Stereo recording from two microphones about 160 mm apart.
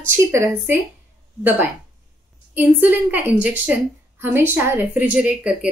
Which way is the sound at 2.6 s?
10° right (ahead or behind).